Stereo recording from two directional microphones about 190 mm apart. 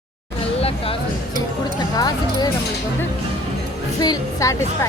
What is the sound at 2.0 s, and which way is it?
Speech, 20° left (ahead or behind).